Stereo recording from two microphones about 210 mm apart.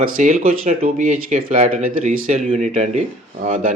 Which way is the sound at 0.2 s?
35° right (ahead or behind).